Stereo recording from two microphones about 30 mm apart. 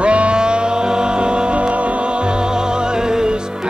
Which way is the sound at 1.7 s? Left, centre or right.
Right.